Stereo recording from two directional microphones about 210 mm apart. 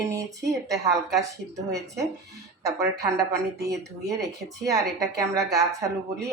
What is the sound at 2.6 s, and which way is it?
A woman's voice, 15° right (ahead or behind).